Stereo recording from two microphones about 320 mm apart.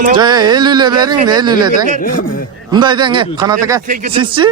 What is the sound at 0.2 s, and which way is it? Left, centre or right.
Speech, centre.